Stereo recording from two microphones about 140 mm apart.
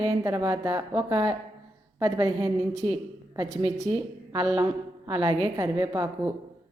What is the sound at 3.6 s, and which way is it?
Speech, 55° right (ahead or behind).